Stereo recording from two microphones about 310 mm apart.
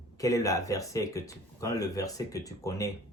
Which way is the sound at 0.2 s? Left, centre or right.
Centre.